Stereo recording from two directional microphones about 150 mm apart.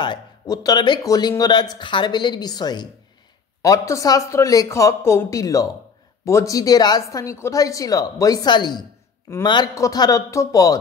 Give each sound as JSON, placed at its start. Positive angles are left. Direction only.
{"t": 0.0, "sound": "speech", "side_deg": 30}